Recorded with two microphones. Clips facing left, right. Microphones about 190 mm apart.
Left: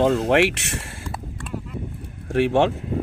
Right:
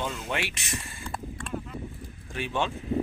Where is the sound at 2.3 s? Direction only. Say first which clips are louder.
Left 12 dB; 75° left (ahead or behind).